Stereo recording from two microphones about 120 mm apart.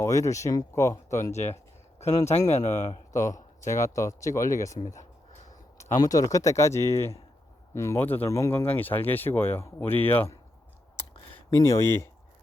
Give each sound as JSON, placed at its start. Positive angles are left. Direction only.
{"t": 0.0, "sound": "speech", "side_deg": 25}
{"t": 1.2, "sound": "speech", "side_deg": 70}
{"t": 3.1, "sound": "speech", "side_deg": 25}
{"t": 11.5, "sound": "speech", "side_deg": 25}